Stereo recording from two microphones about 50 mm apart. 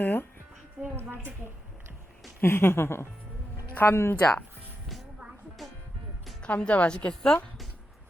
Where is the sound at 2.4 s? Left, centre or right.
Left.